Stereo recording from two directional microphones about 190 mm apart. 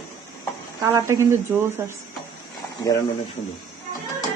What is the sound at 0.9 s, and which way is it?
Speech, 15° right (ahead or behind).